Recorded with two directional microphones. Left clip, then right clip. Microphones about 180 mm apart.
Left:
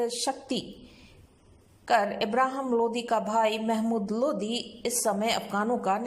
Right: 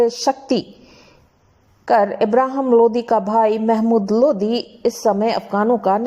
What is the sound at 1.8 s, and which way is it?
A woman's voice, 35° right (ahead or behind).